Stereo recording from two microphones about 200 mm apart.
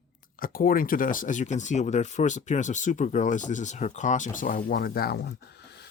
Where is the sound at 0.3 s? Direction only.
45° left (ahead or behind).